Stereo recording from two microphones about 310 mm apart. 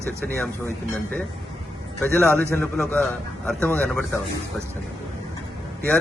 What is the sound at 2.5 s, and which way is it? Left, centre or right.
Speech, centre.